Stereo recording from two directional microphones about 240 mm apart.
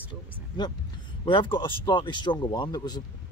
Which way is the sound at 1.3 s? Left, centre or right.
Centre.